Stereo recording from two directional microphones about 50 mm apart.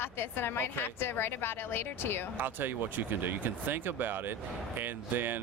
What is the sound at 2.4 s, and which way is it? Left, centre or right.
Speech, right.